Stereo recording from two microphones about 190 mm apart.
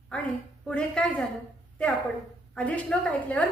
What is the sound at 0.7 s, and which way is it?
Speech, 5° left (ahead or behind).